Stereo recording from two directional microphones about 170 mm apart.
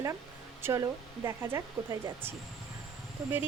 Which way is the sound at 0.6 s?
15° right (ahead or behind).